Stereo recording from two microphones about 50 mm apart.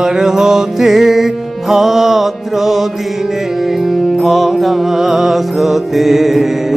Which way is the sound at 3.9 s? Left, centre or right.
Centre.